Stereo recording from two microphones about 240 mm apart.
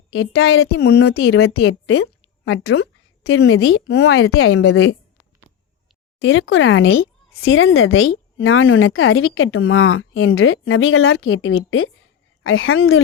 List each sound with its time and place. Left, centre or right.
0.1 s a woman's voice: left
2.0 s a sound: left
3.2 s a woman's voice: left
6.2 s a woman's voice: left